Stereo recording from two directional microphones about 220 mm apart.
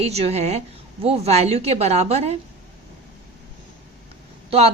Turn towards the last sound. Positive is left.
turn(degrees=-25)  # may be behind; listen again after turning